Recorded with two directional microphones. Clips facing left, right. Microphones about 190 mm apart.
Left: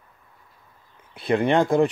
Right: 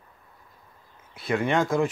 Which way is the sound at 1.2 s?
35° left (ahead or behind).